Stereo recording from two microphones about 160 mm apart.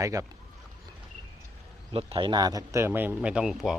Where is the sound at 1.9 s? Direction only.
35° right (ahead or behind); by 3.7 s centre (ahead or behind).